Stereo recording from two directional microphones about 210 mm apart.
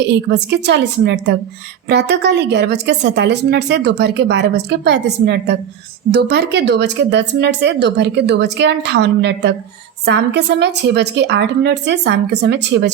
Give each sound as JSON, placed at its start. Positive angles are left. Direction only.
{"t": 0.1, "sound": "a woman's voice", "side_deg": -55}